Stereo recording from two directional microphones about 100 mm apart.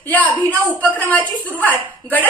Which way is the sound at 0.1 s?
15° left (ahead or behind).